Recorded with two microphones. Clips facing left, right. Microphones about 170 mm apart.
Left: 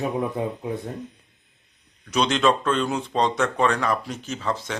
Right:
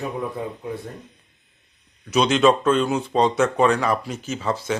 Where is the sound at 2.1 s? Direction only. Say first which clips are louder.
Right 4 dB; 5° right (ahead or behind).